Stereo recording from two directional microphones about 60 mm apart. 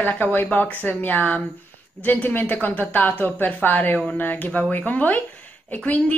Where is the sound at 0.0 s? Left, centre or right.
Left.